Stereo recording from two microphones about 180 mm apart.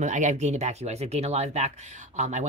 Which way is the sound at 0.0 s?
40° right (ahead or behind).